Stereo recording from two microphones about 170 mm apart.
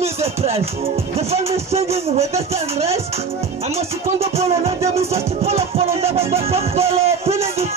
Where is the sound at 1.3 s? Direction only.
35° right (ahead or behind).